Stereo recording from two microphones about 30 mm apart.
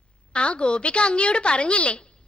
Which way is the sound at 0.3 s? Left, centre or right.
Left.